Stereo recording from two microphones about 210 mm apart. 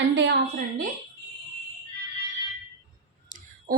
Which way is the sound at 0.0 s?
60° right (ahead or behind).